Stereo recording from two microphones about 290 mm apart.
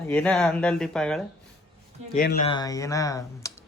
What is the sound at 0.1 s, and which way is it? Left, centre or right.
Speech, centre.